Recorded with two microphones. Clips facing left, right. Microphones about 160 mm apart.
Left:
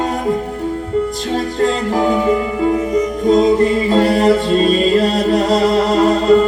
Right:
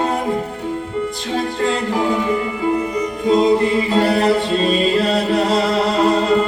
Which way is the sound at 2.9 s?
45° left (ahead or behind).